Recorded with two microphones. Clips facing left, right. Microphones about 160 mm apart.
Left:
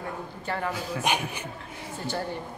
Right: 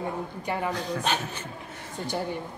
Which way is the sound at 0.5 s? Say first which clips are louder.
Right 1 dB; 15° right (ahead or behind).